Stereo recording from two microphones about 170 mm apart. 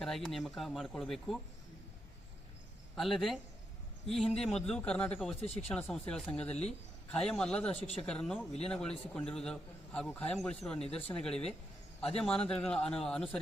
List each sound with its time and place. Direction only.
0.0 s a man's voice: centre (ahead or behind)
3.2 s a man's voice: centre (ahead or behind)
5.4 s speech: 40° left (ahead or behind)
5.7 s a man's voice: 5° left (ahead or behind)
7.7 s speech: 35° left (ahead or behind)
8.0 s a man's voice: 5° left (ahead or behind)